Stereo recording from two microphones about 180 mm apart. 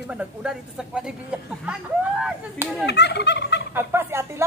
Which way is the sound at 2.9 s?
70° left (ahead or behind).